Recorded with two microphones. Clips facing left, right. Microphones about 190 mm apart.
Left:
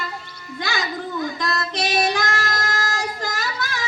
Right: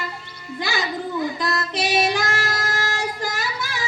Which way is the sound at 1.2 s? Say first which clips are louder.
Right 1 dB; 10° right (ahead or behind).